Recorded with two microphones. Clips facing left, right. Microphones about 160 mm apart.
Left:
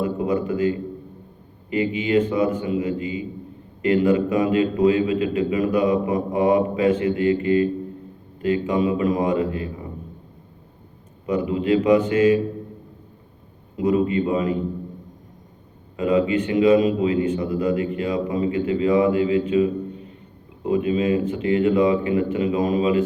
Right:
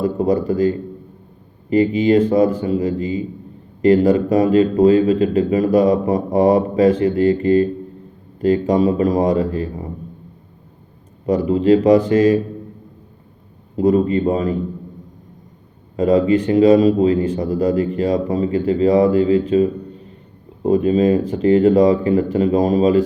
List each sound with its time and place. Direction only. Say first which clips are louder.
0.0 s a man's voice: right 5 dB; 40° right (ahead or behind)
11.3 s a man's voice: right 6 dB; 40° right (ahead or behind)
13.7 s a man's voice: right 5 dB; 40° right (ahead or behind)
16.0 s a man's voice: right 5 dB; 40° right (ahead or behind)